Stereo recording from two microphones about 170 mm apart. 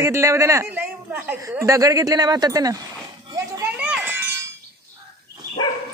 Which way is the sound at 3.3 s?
20° right (ahead or behind).